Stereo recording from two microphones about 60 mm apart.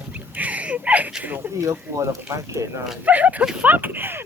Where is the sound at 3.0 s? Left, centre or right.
Right.